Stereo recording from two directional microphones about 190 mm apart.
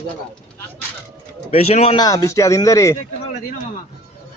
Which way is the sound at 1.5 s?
35° left (ahead or behind).